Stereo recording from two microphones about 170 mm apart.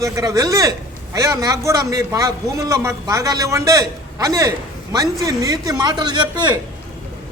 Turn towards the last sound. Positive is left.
turn(degrees=-25)  # may be behind; listen again after turning